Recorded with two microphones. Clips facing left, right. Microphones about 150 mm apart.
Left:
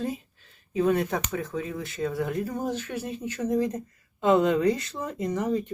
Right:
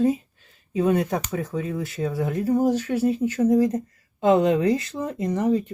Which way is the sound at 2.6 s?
40° right (ahead or behind).